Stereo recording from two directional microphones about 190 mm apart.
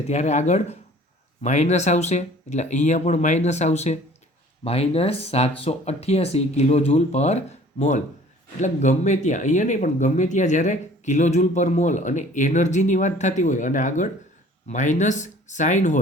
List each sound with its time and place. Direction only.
0.1 s speech: 35° left (ahead or behind)